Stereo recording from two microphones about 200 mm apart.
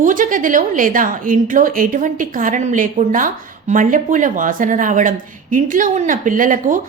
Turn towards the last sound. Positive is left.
turn(degrees=-40)  # may be behind; listen again after turning